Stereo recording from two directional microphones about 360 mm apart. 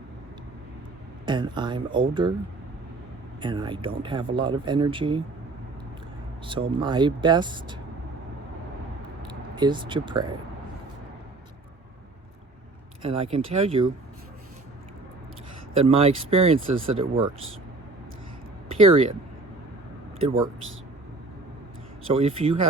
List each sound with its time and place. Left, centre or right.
1.2 s speech: centre
3.4 s speech: centre
6.4 s speech: centre
9.2 s speech: centre
13.0 s speech: centre
15.8 s speech: centre
18.7 s speech: centre
20.2 s speech: centre
22.0 s speech: centre